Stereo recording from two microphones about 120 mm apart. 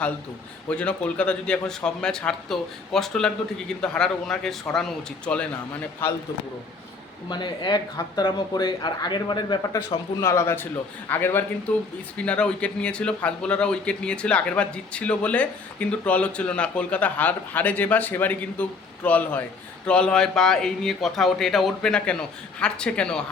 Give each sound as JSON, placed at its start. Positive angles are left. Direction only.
{"t": 0.7, "sound": "speech", "side_deg": 10}
{"t": 7.3, "sound": "speech", "side_deg": 40}
{"t": 10.2, "sound": "a man's voice", "side_deg": 25}